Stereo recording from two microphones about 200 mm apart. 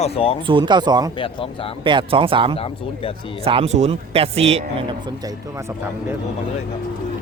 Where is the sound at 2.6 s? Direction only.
30° left (ahead or behind).